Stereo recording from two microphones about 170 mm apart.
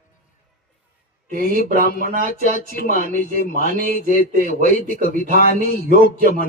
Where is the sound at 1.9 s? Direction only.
55° right (ahead or behind).